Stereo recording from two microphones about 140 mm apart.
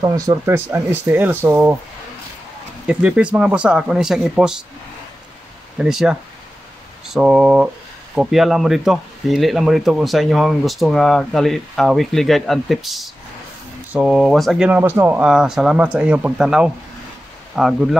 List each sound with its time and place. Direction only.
0.0 s speech: 25° right (ahead or behind)
2.9 s speech: 10° right (ahead or behind)
5.8 s speech: 5° right (ahead or behind)
14.7 s speech: 15° right (ahead or behind)